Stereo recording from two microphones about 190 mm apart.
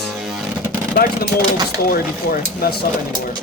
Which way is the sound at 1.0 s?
55° left (ahead or behind).